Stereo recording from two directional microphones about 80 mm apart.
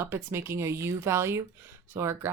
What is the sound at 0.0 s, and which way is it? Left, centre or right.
A woman's voice, right.